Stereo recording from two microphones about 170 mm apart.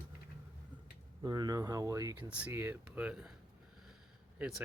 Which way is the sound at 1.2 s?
25° right (ahead or behind).